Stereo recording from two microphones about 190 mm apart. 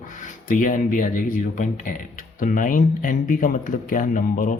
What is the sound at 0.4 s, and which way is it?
Speech, 45° left (ahead or behind).